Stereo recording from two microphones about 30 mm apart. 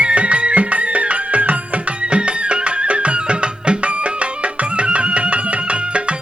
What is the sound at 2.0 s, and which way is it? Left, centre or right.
Music, right.